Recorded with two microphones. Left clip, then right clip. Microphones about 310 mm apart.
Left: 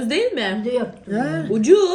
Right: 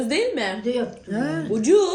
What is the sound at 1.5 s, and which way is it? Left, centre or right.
Speech, centre.